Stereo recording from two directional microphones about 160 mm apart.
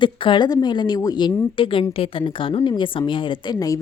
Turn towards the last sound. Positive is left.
turn(degrees=25)  # may be behind; listen again after turning